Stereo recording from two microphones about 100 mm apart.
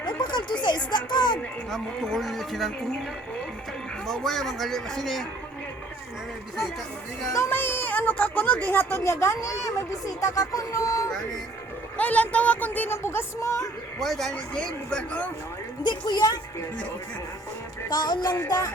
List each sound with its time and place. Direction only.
0.2 s a woman's voice: 50° left (ahead or behind)
1.7 s a man's voice: centre (ahead or behind)
4.0 s a man's voice: 5° left (ahead or behind)
7.3 s speech: 20° left (ahead or behind)
11.9 s speech: 15° left (ahead or behind); by 13.7 s 30° left (ahead or behind)
14.0 s speech: 5° left (ahead or behind)
15.8 s a woman's voice: 50° left (ahead or behind)
17.8 s a woman's voice: 45° left (ahead or behind)